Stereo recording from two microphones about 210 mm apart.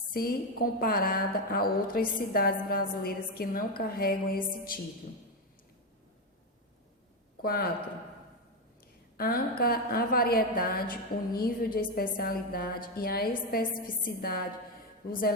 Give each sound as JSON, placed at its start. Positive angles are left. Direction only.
{"t": 0.1, "sound": "a woman's voice", "side_deg": 45}
{"t": 7.4, "sound": "speech", "side_deg": 45}
{"t": 9.1, "sound": "a woman's voice", "side_deg": 45}